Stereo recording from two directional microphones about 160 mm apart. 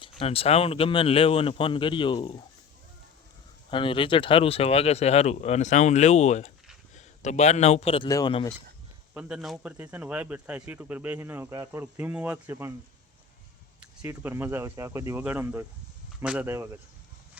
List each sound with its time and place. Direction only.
0.0 s speech: 35° left (ahead or behind)
3.7 s a man's voice: 30° left (ahead or behind)
9.1 s speech: 5° right (ahead or behind)
14.0 s speech: 15° right (ahead or behind)